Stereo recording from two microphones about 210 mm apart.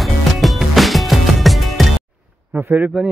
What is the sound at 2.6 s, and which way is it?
Speech, 5° right (ahead or behind).